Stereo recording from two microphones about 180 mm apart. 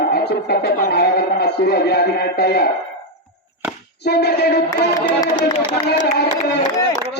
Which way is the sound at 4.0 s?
65° left (ahead or behind).